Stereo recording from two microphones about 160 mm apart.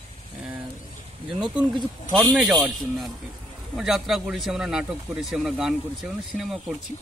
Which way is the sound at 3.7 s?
5° right (ahead or behind).